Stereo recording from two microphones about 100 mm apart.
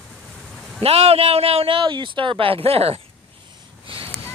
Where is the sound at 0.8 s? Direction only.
75° right (ahead or behind).